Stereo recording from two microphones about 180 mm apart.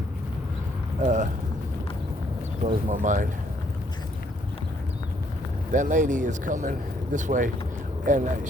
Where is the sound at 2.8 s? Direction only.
45° right (ahead or behind).